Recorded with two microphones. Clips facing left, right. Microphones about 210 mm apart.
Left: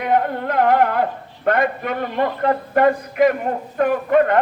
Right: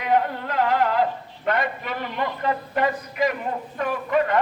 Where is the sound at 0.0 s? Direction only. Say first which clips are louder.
Left 3 dB; 55° left (ahead or behind).